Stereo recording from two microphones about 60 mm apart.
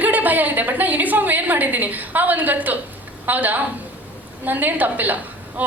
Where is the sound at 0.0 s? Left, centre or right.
Right.